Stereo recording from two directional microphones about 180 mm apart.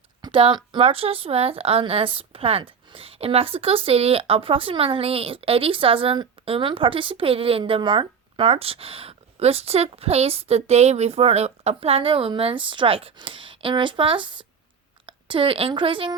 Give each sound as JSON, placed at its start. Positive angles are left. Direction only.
{"t": 0.2, "sound": "a woman's voice", "side_deg": -30}